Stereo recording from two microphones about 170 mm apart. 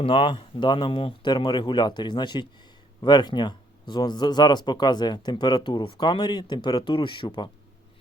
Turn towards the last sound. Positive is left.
turn(degrees=25)  # may be behind; listen again after turning